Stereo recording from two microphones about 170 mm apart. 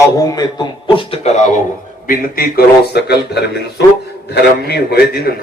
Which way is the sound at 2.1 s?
60° left (ahead or behind).